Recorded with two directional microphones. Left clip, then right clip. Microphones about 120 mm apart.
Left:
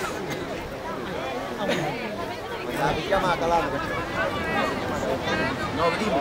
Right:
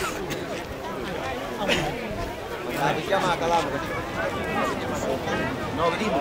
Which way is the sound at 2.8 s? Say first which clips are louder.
Even; 5° left (ahead or behind).